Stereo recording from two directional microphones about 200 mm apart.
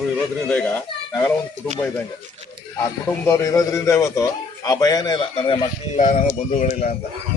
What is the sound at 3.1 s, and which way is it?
A man's voice, 15° left (ahead or behind).